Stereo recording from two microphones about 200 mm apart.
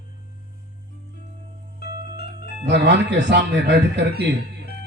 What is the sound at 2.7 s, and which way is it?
A man's voice, 60° right (ahead or behind).